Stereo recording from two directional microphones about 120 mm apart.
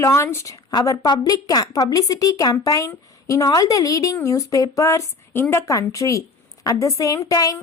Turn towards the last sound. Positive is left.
turn(degrees=30)  # may be behind; listen again after turning